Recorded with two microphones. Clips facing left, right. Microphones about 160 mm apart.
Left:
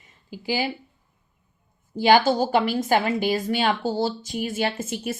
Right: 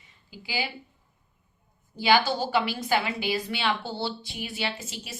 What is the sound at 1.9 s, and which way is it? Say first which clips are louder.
A woman's voice: left 5 dB; 45° left (ahead or behind).